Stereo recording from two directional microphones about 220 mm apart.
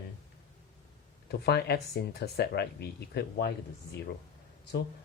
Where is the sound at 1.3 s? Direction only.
50° left (ahead or behind).